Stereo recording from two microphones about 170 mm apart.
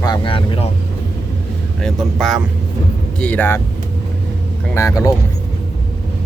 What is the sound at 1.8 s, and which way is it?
A man's voice, centre (ahead or behind).